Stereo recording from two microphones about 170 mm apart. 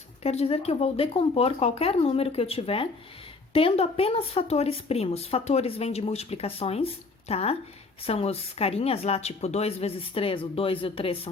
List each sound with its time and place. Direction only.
0.2 s speech: 40° left (ahead or behind)